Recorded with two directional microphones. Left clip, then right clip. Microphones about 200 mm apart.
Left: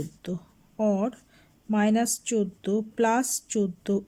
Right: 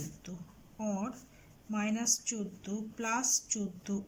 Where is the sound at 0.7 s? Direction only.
45° left (ahead or behind).